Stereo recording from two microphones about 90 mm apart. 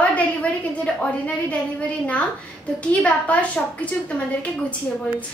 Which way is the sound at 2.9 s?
15° left (ahead or behind).